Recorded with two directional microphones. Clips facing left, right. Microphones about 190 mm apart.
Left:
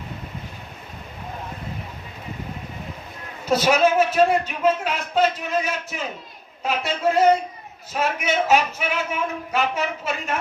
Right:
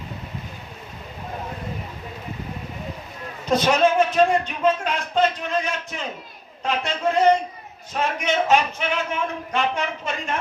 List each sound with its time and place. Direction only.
3.4 s a man's voice: 5° left (ahead or behind)